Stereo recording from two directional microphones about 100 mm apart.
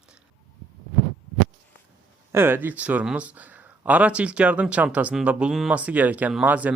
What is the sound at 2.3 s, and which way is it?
Speech, 20° right (ahead or behind).